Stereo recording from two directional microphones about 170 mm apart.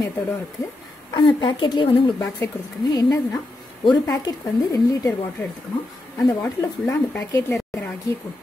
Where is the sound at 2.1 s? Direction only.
20° left (ahead or behind).